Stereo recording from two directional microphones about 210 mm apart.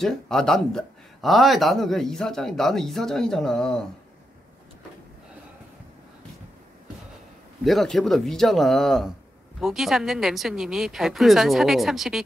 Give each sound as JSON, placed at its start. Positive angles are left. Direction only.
{"t": 0.0, "sound": "speech", "side_deg": 0}
{"t": 7.6, "sound": "speech", "side_deg": 0}